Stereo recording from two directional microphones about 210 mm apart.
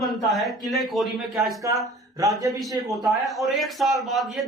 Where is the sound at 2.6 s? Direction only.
Centre (ahead or behind).